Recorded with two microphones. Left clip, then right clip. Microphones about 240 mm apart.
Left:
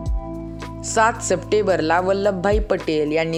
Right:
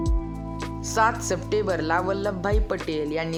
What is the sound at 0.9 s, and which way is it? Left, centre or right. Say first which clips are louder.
Speech: left 5 dB; centre.